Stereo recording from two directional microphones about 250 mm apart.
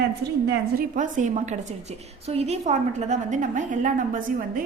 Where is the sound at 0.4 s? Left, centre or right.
Right.